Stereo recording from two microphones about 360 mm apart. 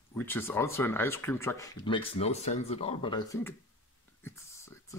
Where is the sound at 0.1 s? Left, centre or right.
Centre.